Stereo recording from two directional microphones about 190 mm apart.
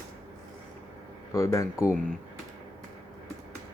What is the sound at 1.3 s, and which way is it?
Speech, 15° left (ahead or behind).